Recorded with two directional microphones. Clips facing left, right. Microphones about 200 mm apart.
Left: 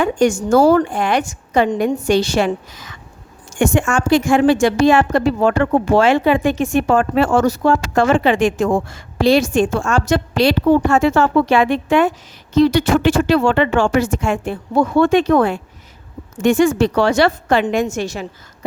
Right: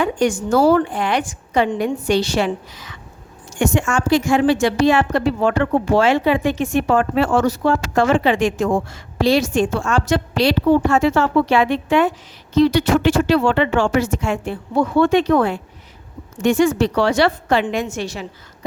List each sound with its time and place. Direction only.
0.0 s a woman's voice: 45° left (ahead or behind)